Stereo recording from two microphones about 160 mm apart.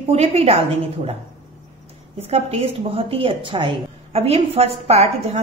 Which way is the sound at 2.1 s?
40° right (ahead or behind).